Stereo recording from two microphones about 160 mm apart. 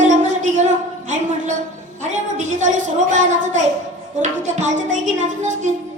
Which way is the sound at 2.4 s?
50° right (ahead or behind).